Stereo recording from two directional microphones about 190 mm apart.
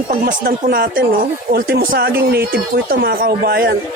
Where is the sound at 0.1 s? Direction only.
45° right (ahead or behind).